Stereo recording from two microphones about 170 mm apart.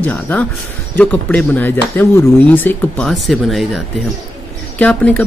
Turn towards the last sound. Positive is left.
turn(degrees=10)  # may be behind; listen again after turning